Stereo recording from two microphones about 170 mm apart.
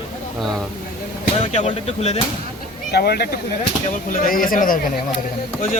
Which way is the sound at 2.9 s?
70° left (ahead or behind).